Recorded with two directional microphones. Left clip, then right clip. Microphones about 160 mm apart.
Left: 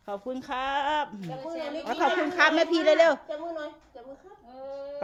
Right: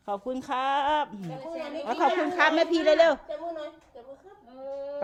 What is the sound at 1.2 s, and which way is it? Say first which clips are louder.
Speech: left 1 dB; centre (ahead or behind).